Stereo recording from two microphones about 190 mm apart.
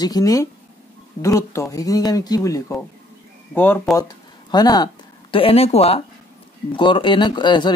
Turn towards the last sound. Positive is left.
turn(degrees=25)  # may be behind; listen again after turning